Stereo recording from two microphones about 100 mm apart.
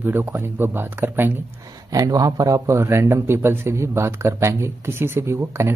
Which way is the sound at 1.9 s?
40° right (ahead or behind).